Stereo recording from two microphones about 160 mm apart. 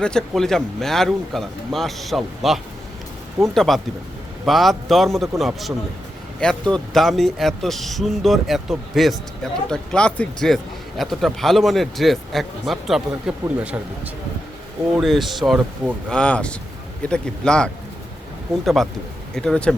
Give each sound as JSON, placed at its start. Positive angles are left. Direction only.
{"t": 0.0, "sound": "speech", "side_deg": 5}
{"t": 14.9, "sound": "speech", "side_deg": 0}
{"t": 16.0, "sound": "speech", "side_deg": 5}